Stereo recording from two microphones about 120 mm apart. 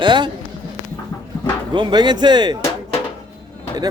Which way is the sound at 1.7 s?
40° right (ahead or behind).